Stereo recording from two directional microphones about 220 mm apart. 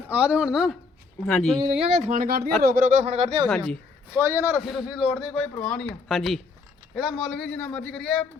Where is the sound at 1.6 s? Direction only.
25° right (ahead or behind).